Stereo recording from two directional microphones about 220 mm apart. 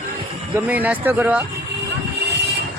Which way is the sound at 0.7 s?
5° right (ahead or behind).